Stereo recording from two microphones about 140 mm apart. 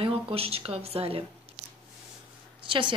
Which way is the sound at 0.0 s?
45° right (ahead or behind).